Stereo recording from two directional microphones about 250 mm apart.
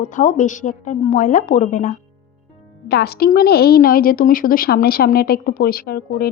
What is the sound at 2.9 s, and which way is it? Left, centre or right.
A woman's voice, left.